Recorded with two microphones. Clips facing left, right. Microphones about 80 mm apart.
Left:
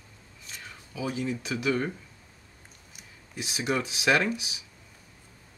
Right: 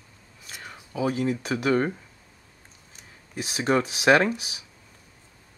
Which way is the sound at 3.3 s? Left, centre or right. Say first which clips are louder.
Right 6 dB; right.